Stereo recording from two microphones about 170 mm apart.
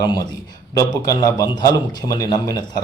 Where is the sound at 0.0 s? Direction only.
20° left (ahead or behind).